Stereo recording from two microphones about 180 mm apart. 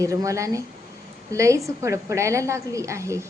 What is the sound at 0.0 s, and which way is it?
A woman's voice, 15° right (ahead or behind).